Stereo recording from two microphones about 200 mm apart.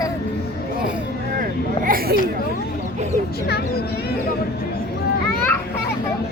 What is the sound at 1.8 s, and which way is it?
Speech, 45° right (ahead or behind).